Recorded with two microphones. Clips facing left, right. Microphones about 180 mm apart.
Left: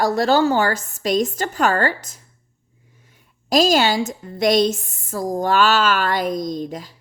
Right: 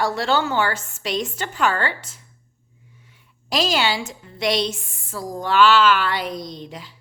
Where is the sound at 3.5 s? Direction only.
45° left (ahead or behind).